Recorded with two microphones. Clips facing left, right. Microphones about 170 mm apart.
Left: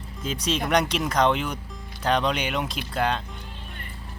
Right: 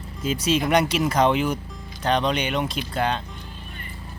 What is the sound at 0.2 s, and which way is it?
Speech, 5° right (ahead or behind).